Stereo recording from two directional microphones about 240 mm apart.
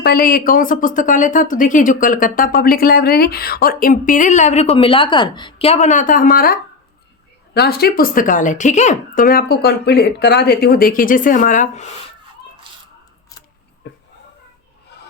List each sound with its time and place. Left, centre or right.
0.0 s a woman's voice: left
13.8 s a sound: left
14.9 s filing: left